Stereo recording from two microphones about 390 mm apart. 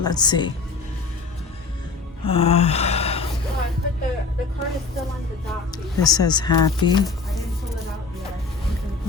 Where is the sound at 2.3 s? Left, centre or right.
Centre.